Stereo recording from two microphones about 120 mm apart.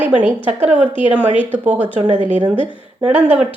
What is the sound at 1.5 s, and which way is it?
Speech, 15° right (ahead or behind).